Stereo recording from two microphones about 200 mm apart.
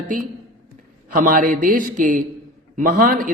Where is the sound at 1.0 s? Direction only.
45° right (ahead or behind).